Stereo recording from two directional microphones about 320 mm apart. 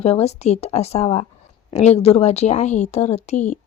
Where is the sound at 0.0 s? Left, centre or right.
Centre.